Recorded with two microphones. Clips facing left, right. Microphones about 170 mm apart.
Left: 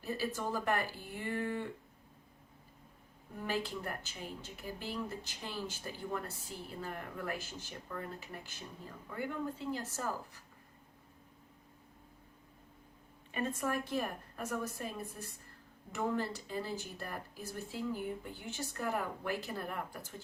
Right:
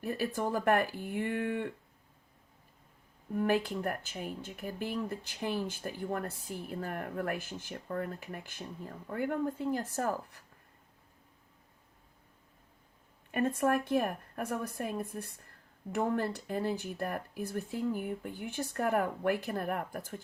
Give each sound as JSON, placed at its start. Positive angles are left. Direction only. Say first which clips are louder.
{"t": 0.0, "sound": "speech", "louder": "right 4 dB", "side_deg": -55}
{"t": 3.3, "sound": "a woman's voice", "louder": "right 8 dB", "side_deg": -55}
{"t": 13.3, "sound": "speech", "louder": "right 7 dB", "side_deg": -55}